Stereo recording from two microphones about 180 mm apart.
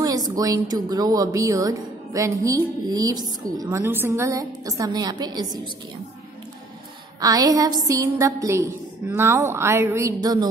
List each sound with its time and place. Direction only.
0.0 s a sound: 20° right (ahead or behind)
0.8 s speech: 20° right (ahead or behind)
7.2 s a woman's voice: 20° right (ahead or behind)